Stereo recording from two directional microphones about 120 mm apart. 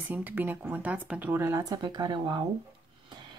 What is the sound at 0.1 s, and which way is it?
Speech, 15° right (ahead or behind).